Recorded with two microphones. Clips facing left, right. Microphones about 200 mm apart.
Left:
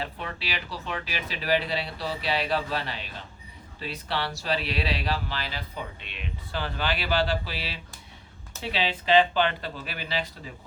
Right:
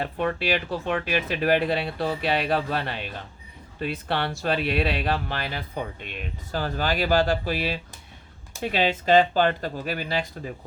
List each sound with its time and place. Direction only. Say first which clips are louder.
0.0 s speech: right 9 dB; 55° right (ahead or behind)